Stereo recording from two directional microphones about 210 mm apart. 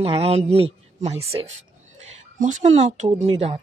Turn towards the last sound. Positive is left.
turn(degrees=-30)  # may be behind; listen again after turning